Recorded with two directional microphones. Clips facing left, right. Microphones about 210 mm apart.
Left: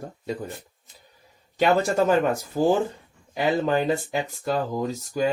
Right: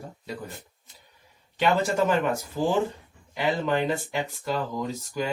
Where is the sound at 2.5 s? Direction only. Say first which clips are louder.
Left 4 dB; 45° left (ahead or behind).